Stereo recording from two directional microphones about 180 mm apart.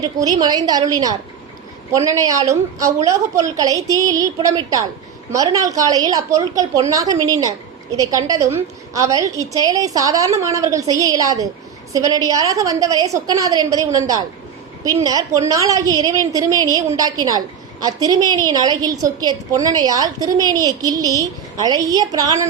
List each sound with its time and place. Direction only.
0.0 s a woman's voice: 20° right (ahead or behind)